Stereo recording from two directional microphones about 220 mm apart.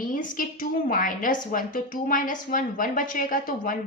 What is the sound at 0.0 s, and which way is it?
A woman's voice, 40° left (ahead or behind).